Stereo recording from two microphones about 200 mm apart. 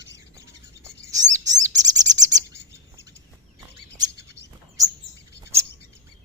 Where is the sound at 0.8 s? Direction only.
15° right (ahead or behind).